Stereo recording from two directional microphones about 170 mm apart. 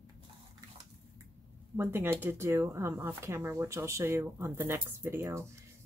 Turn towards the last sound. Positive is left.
turn(degrees=-15)  # may be behind; listen again after turning